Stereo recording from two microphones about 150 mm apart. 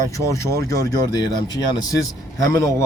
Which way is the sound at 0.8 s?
25° left (ahead or behind).